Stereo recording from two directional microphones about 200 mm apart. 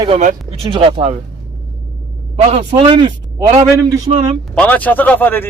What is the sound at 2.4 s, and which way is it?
Speech, 35° right (ahead or behind).